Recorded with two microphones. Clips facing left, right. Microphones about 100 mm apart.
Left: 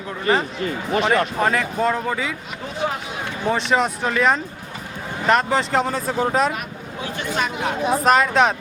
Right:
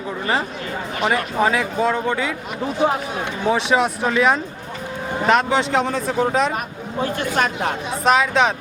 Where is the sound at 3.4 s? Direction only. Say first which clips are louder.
Right 2 dB; centre (ahead or behind).